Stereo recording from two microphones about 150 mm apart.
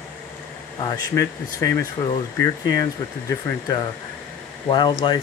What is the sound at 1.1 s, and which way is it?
Speech, 20° left (ahead or behind).